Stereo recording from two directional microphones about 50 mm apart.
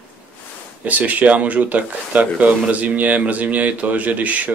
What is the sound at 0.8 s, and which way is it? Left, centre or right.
Speech, right.